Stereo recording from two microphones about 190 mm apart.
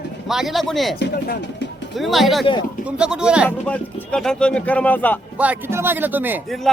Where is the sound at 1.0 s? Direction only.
60° left (ahead or behind).